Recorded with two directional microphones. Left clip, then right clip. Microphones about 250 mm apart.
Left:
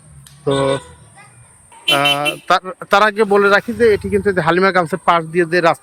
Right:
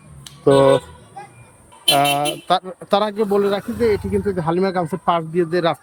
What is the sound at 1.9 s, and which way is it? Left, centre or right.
Speech, centre.